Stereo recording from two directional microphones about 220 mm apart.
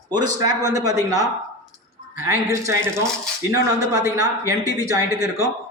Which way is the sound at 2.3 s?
10° right (ahead or behind).